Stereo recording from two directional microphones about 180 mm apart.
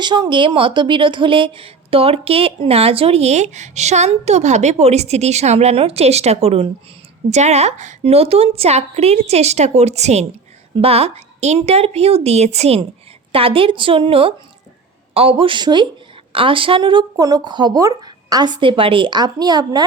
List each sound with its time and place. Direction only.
0.0 s speech: 25° right (ahead or behind)